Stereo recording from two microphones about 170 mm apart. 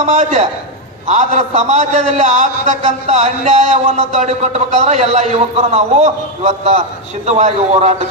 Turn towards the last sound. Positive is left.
turn(degrees=-40)  # may be behind; listen again after turning